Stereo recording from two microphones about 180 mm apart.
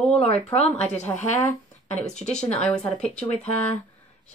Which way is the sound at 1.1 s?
15° left (ahead or behind).